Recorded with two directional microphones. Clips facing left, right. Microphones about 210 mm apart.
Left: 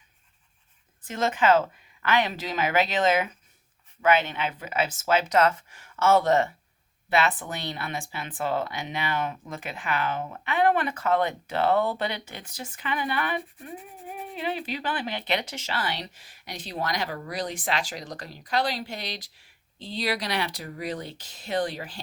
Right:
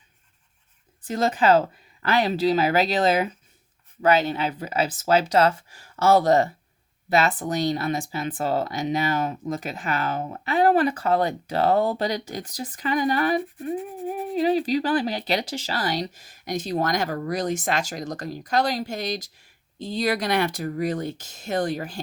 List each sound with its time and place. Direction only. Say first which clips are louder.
1.0 s speech: right 3 dB; 35° right (ahead or behind)